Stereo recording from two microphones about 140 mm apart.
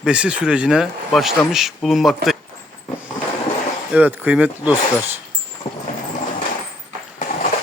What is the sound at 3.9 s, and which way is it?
Speech, 10° right (ahead or behind).